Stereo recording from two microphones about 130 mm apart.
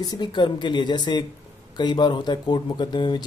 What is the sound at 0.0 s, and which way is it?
Speech, 35° left (ahead or behind).